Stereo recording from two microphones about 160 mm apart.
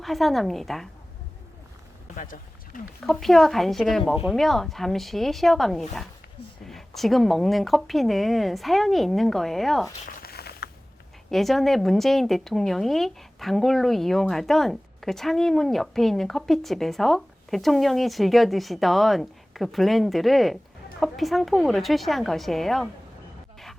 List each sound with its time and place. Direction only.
0.0 s speech: centre (ahead or behind)
2.1 s speech: 60° left (ahead or behind)
3.0 s speech: centre (ahead or behind)
10.1 s a sound: 75° left (ahead or behind)
11.3 s speech: centre (ahead or behind)